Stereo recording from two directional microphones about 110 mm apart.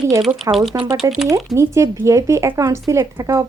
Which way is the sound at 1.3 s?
30° right (ahead or behind).